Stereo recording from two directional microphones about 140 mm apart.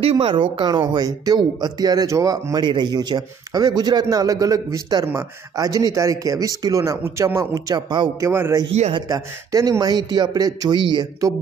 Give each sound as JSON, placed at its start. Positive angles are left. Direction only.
{"t": 0.0, "sound": "speech", "side_deg": -40}
{"t": 8.3, "sound": "speech", "side_deg": -20}